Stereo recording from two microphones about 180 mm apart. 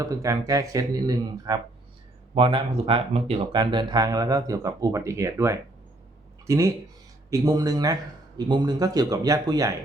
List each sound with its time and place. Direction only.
0.0 s speech: 20° right (ahead or behind)